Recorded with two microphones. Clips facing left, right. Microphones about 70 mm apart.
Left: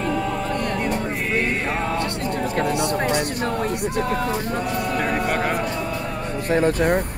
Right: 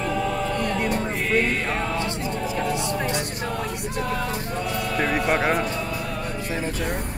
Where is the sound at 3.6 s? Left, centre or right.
Left.